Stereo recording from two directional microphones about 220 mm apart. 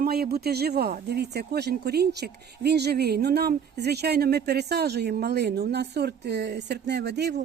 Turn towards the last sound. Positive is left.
turn(degrees=-50)  # may be behind; listen again after turning